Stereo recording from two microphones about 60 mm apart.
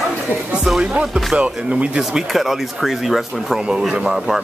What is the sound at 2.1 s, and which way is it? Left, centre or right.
Speech, centre.